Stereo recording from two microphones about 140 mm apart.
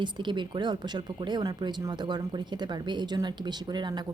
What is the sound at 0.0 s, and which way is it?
Speech, 35° right (ahead or behind).